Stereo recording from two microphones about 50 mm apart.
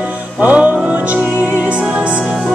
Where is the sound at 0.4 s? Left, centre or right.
Right.